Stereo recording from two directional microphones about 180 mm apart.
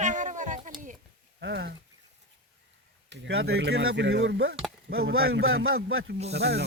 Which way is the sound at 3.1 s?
75° right (ahead or behind).